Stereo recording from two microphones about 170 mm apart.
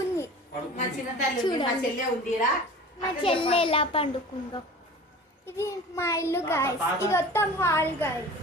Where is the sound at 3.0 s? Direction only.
30° left (ahead or behind).